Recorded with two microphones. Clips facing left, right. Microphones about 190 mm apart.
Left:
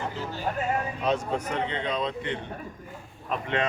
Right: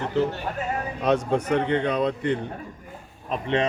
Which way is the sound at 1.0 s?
65° right (ahead or behind).